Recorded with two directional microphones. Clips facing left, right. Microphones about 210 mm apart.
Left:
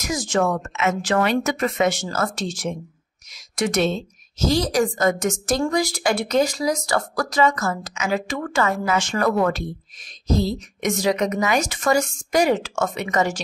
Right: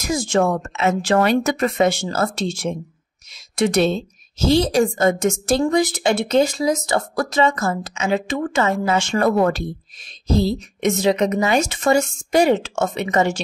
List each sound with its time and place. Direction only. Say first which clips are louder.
0.0 s a woman's voice: right 3 dB; 30° right (ahead or behind)